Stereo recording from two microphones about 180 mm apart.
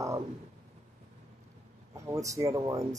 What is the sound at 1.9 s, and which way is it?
Speech, 15° right (ahead or behind).